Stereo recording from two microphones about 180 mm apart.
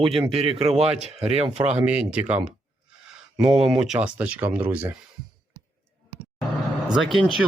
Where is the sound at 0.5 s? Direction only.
35° right (ahead or behind).